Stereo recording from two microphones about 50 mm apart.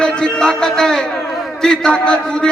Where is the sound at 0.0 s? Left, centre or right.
Centre.